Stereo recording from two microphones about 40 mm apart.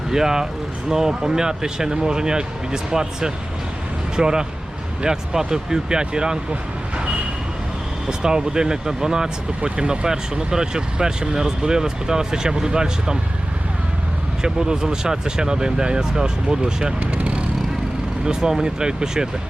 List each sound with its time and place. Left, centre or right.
0.1 s speech: centre
8.0 s speech: centre
14.4 s speech: centre
17.0 s speech: right
18.3 s speech: centre